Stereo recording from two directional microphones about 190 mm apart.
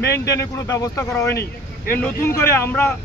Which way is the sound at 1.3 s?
55° left (ahead or behind).